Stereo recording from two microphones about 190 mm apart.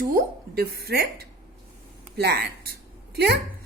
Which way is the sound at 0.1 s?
55° right (ahead or behind).